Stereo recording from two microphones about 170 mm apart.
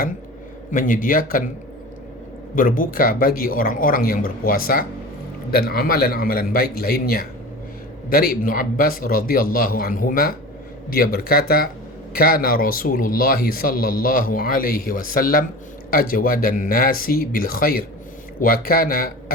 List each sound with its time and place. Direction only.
0.7 s speech: 50° left (ahead or behind)
2.6 s speech: 55° left (ahead or behind)